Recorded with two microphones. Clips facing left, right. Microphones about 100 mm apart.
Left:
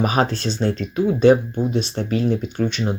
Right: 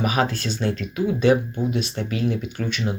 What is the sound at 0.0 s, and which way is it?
Speech, 35° left (ahead or behind).